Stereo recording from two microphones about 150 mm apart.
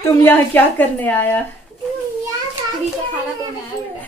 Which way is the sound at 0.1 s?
15° left (ahead or behind).